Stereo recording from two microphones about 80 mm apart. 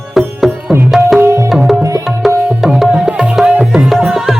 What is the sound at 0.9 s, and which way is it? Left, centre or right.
Tabla, centre.